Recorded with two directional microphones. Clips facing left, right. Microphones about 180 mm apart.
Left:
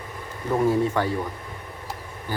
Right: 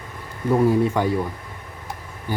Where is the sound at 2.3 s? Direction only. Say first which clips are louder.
Right 3 dB; 15° right (ahead or behind).